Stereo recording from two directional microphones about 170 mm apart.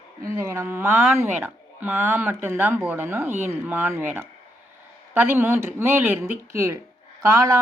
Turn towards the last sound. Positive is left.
turn(degrees=-20)  # may be behind; listen again after turning